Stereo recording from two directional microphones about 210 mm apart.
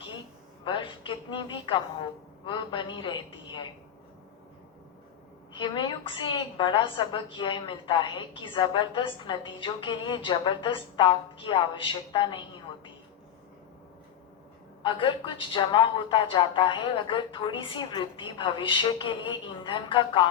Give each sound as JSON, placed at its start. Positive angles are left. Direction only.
{"t": 0.6, "sound": "a woman's voice", "side_deg": 25}
{"t": 5.5, "sound": "a woman's voice", "side_deg": 20}
{"t": 14.8, "sound": "a woman's voice", "side_deg": 25}